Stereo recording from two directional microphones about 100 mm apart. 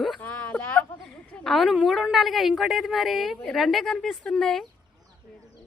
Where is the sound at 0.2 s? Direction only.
15° left (ahead or behind).